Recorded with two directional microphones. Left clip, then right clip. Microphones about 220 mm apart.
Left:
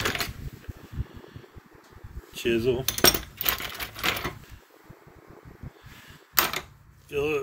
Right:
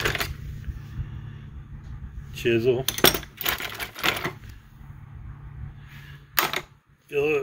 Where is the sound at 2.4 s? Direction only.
50° left (ahead or behind).